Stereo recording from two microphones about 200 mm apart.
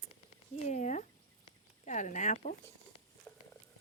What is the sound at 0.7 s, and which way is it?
Speech, 35° left (ahead or behind).